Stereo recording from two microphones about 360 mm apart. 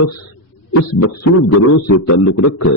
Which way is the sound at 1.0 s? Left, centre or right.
Left.